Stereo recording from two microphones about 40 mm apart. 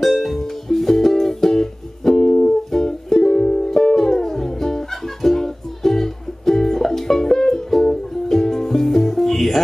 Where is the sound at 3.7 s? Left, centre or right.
Centre.